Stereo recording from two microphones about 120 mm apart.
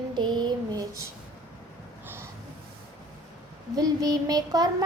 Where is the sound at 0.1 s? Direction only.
35° right (ahead or behind).